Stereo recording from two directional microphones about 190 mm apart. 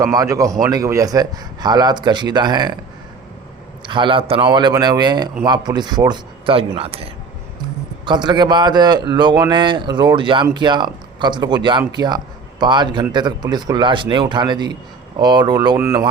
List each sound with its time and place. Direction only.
0.0 s a man's voice: 20° right (ahead or behind)
3.8 s speech: 25° right (ahead or behind)